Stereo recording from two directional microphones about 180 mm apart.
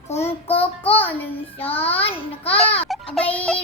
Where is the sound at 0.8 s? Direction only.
10° left (ahead or behind).